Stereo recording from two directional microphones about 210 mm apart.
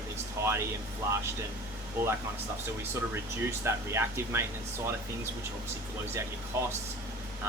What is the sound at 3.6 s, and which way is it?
Speech, 10° right (ahead or behind).